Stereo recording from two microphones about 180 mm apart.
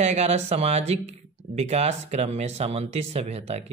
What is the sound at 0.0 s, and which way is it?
A woman's voice, 35° right (ahead or behind).